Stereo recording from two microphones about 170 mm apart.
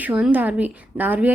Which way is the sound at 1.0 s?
10° right (ahead or behind).